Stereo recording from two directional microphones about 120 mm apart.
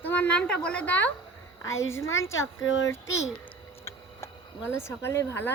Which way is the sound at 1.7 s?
25° left (ahead or behind).